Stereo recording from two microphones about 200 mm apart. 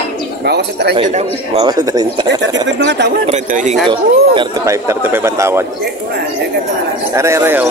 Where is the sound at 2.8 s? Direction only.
60° right (ahead or behind).